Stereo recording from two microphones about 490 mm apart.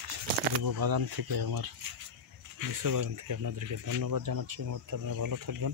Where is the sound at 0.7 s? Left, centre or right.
Right.